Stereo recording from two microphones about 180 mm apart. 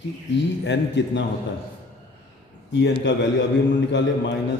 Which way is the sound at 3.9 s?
80° left.